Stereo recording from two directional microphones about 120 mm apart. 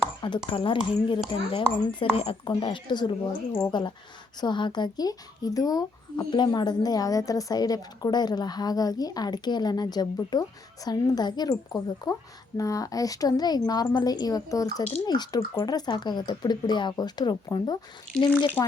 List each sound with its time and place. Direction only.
0.5 s a woman's voice: 45° left (ahead or behind)